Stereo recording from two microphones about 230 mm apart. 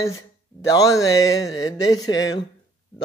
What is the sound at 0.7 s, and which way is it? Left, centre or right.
Speech, centre.